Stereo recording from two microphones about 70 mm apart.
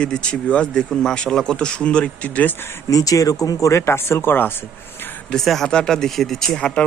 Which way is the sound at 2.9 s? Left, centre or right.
Left.